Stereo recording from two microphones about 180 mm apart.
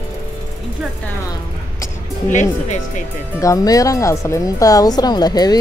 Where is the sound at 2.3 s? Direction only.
45° left (ahead or behind).